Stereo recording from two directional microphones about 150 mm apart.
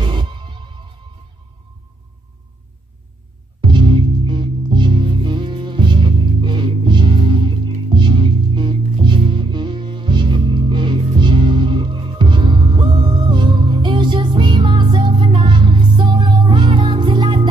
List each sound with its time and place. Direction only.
0.0 s music: 30° right (ahead or behind)
3.6 s music: 30° right (ahead or behind)